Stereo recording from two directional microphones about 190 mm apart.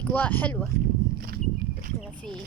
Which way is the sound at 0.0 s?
10° left (ahead or behind).